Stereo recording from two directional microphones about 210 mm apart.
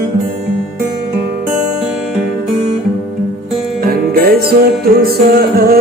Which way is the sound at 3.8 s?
45° right (ahead or behind).